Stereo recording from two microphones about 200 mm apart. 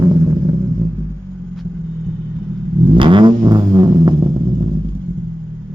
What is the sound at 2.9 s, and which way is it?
Vehicle, 25° right (ahead or behind).